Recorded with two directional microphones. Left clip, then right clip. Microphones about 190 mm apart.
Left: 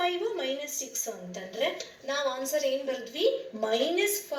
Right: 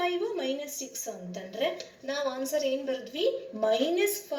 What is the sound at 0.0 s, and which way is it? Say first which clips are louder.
A woman's voice: even; 45° right (ahead or behind).